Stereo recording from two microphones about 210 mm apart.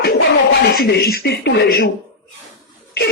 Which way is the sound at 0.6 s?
50° left (ahead or behind).